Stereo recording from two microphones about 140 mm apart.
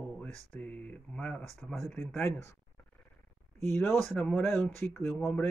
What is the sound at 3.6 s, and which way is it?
Speech, 20° left (ahead or behind).